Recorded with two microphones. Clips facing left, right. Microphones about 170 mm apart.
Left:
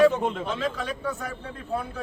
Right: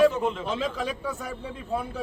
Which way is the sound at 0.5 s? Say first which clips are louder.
Even; 5° right (ahead or behind).